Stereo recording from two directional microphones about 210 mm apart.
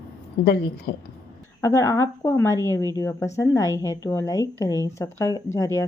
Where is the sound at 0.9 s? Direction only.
55° left (ahead or behind).